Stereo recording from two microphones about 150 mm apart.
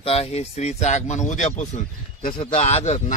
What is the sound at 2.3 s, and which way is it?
Speech, 35° left (ahead or behind).